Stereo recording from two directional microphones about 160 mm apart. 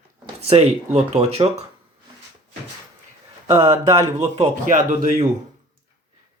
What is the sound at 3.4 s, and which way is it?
Speech, 15° right (ahead or behind).